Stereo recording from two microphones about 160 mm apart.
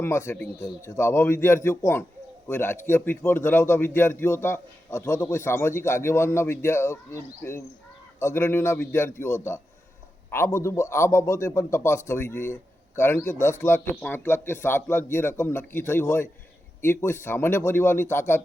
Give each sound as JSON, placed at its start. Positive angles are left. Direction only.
{"t": 0.0, "sound": "a man's voice", "side_deg": 15}